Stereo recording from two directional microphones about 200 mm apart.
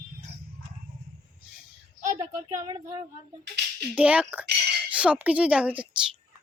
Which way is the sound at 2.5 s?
15° right (ahead or behind).